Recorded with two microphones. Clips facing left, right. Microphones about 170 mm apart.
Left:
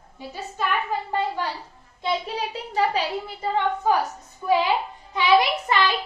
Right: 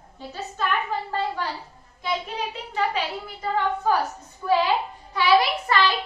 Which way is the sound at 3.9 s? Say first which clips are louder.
Left 1 dB; 15° left (ahead or behind).